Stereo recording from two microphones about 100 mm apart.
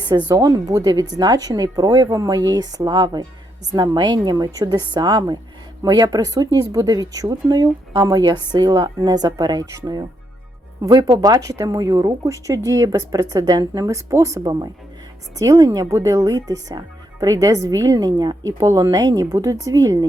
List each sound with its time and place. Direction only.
0.3 s a woman's voice: 40° right (ahead or behind)